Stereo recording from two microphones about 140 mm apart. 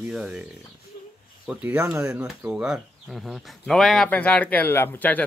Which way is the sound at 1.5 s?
10° right (ahead or behind).